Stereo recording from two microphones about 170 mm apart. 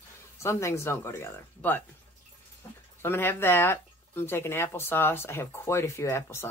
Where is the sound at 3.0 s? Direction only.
15° left (ahead or behind).